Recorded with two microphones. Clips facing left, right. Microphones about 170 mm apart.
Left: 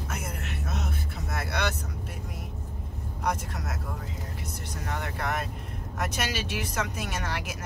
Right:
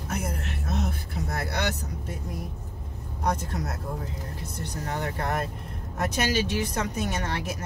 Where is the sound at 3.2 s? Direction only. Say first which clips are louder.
Right 3 dB; 35° right (ahead or behind).